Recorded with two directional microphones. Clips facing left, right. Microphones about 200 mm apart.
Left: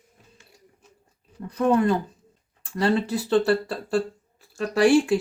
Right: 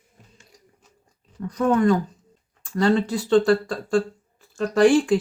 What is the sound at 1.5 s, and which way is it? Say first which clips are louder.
Speech: right 1 dB; 30° left (ahead or behind).